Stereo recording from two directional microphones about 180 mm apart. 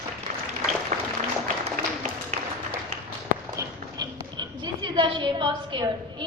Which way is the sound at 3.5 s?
25° right (ahead or behind).